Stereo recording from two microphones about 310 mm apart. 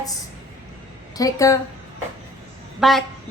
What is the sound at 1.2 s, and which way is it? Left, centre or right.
Speech, centre.